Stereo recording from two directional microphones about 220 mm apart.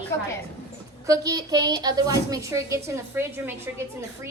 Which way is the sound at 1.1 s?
15° right (ahead or behind).